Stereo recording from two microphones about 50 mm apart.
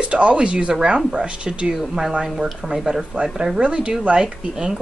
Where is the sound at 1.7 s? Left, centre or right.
Centre.